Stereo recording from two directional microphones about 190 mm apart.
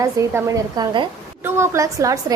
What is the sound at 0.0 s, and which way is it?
A woman's voice, 15° right (ahead or behind).